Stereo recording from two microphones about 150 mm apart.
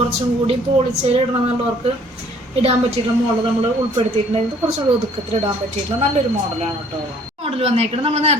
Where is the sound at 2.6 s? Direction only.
45° right (ahead or behind).